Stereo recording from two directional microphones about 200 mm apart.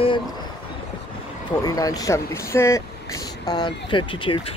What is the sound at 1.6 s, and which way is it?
Speech, 20° left (ahead or behind).